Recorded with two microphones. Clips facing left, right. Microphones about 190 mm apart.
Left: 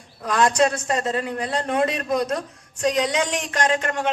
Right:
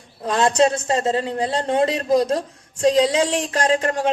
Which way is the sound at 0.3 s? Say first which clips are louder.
Right 2 dB; 25° right (ahead or behind).